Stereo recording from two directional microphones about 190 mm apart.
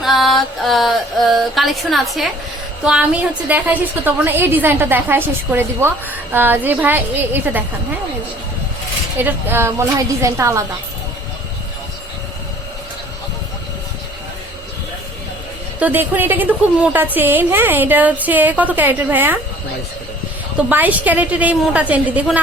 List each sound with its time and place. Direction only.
0.0 s music: centre (ahead or behind)
3.5 s a woman's voice: 10° right (ahead or behind)
9.1 s a woman's voice: 10° right (ahead or behind)
15.8 s a woman's voice: 10° right (ahead or behind)
20.6 s a woman's voice: 10° right (ahead or behind)